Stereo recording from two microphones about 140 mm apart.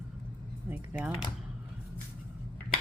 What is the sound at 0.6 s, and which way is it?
Speech, 15° right (ahead or behind).